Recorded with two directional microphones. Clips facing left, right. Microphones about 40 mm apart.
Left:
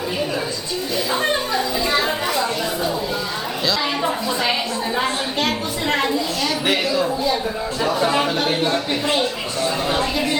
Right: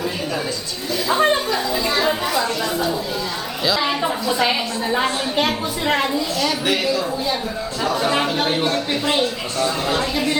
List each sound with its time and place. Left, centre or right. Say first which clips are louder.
1.1 s a sound: right 4 dB; centre
3.7 s a woman's voice: right 2 dB; centre
7.8 s speech: left 1 dB; centre
8.4 s a woman's voice: even; centre
9.6 s a woman's voice: even; left